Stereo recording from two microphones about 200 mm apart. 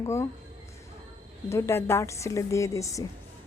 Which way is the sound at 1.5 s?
15° left (ahead or behind).